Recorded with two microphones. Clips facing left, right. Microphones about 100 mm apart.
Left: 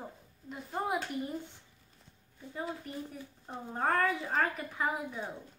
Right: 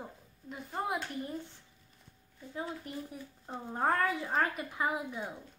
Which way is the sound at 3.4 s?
10° right (ahead or behind).